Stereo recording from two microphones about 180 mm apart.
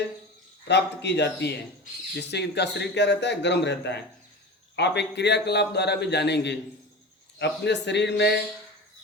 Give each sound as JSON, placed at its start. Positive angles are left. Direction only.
{"t": 0.7, "sound": "a man's voice", "side_deg": 70}